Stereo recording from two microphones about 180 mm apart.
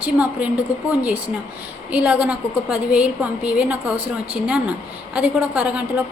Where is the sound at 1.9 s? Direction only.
10° right (ahead or behind).